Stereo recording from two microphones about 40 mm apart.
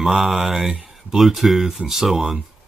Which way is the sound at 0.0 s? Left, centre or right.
Centre.